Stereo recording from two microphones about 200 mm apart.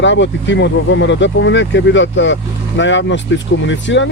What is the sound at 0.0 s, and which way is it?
Speech, 65° left (ahead or behind).